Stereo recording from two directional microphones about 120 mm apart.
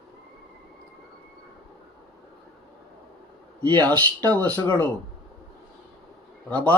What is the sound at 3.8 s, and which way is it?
Speech, 15° left (ahead or behind).